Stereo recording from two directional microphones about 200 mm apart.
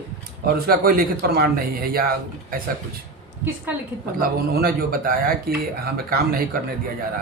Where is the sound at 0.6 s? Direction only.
50° right (ahead or behind).